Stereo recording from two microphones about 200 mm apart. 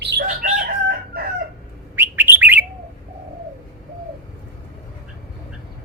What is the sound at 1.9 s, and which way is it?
Bird, 10° right (ahead or behind).